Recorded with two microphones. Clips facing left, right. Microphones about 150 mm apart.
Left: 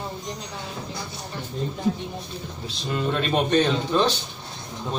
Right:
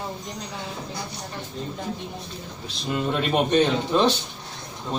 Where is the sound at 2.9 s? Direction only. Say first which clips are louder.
Even; 15° right (ahead or behind).